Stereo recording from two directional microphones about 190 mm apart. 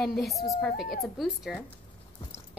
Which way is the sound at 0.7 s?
50° left (ahead or behind).